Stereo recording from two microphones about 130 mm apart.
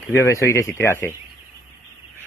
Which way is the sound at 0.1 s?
20° left (ahead or behind).